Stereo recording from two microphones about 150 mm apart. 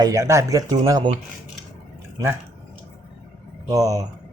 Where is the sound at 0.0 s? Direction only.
20° right (ahead or behind).